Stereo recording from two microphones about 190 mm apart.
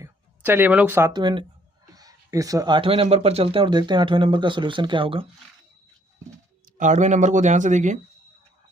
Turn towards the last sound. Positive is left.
turn(degrees=-40)  # may be behind; listen again after turning